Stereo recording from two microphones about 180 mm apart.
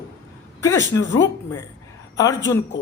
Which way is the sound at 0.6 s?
20° left (ahead or behind).